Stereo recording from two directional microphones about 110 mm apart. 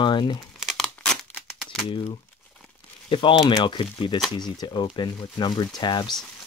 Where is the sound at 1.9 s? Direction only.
50° left (ahead or behind).